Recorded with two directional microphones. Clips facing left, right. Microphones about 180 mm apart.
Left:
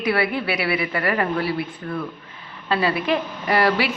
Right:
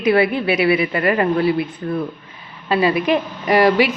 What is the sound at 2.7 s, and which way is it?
A woman's voice, 15° right (ahead or behind).